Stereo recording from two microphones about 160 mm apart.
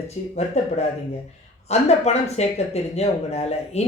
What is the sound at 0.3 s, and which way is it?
Speech, 45° left (ahead or behind).